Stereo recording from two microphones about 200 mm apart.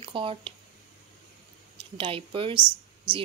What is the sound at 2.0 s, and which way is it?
Speech, 25° right (ahead or behind).